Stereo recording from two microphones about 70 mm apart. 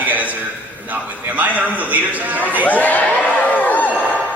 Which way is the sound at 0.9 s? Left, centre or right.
Right.